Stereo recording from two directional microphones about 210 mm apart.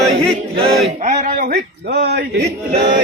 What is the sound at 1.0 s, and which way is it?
Speech, 35° right (ahead or behind).